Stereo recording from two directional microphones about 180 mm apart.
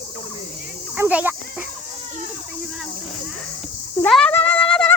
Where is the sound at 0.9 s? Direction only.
10° right (ahead or behind).